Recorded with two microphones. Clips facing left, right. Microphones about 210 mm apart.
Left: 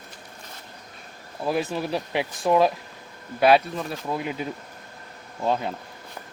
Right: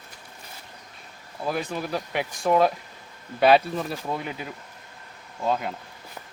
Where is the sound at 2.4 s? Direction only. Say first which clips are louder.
Even; centre (ahead or behind).